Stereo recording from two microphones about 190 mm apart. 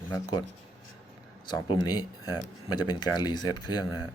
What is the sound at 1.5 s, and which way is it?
Speech, 20° left (ahead or behind).